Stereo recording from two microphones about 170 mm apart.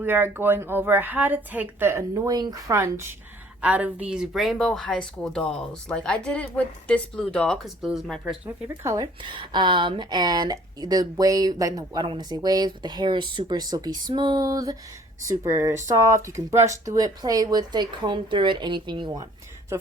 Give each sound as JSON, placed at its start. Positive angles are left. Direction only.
{"t": 0.0, "sound": "a woman's voice", "side_deg": -10}
{"t": 8.4, "sound": "a woman's voice", "side_deg": -15}